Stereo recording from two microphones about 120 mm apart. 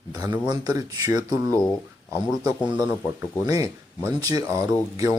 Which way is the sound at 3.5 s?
30° right (ahead or behind).